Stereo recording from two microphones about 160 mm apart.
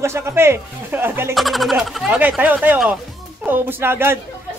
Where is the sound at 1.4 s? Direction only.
Centre (ahead or behind).